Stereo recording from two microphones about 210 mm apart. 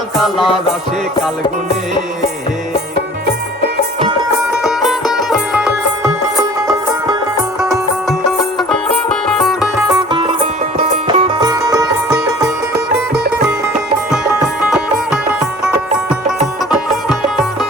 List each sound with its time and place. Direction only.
0.2 s music: centre (ahead or behind)
4.5 s music: centre (ahead or behind)
9.3 s music: centre (ahead or behind)
10.1 s music: 25° right (ahead or behind)
14.6 s music: 5° right (ahead or behind)